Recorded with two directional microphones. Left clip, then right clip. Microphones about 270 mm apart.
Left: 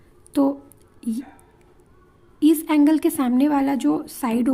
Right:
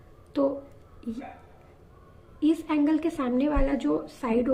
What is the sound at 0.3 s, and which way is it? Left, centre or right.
Speech, left.